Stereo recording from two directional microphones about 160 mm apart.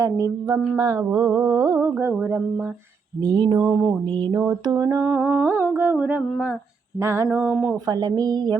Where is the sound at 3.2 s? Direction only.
25° right (ahead or behind).